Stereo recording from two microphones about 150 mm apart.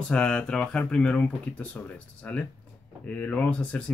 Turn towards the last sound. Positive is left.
turn(degrees=10)  # may be behind; listen again after turning